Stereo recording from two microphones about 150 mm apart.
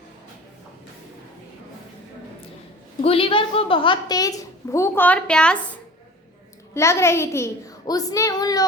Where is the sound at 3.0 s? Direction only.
40° left (ahead or behind); by 5.6 s 5° left (ahead or behind).